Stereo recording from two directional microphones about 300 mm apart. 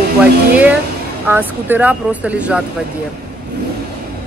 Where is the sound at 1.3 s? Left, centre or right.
Centre.